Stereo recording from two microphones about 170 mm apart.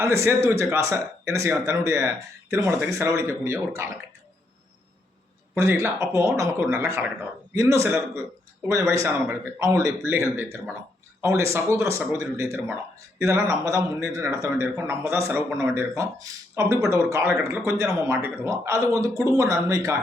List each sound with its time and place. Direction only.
0.0 s speech: 15° right (ahead or behind)
5.5 s speech: 15° right (ahead or behind)